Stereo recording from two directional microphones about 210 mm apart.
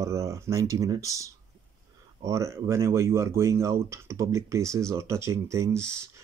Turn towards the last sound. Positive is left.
turn(degrees=-15)  # may be behind; listen again after turning